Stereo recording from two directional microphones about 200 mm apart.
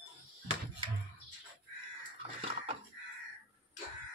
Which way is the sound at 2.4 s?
30° right (ahead or behind).